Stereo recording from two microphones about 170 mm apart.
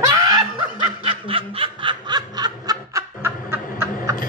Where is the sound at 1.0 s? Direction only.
30° right (ahead or behind); by 4.1 s 15° right (ahead or behind).